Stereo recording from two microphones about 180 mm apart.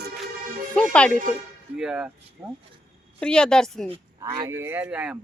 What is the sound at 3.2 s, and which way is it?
Speech, 5° left (ahead or behind).